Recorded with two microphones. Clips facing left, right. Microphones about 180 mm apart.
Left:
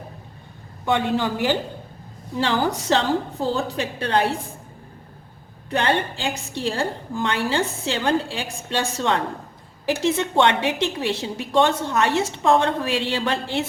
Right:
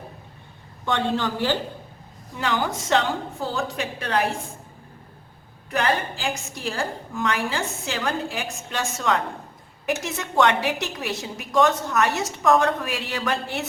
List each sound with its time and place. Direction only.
0.9 s a woman's voice: 10° left (ahead or behind)
2.3 s a woman's voice: 30° left (ahead or behind)
5.7 s a woman's voice: 30° left (ahead or behind)